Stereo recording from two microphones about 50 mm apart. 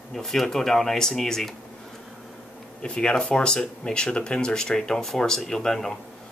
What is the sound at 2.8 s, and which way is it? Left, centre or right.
Speech, left.